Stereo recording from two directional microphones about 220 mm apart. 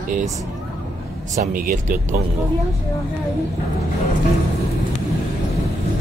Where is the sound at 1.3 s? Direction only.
35° right (ahead or behind).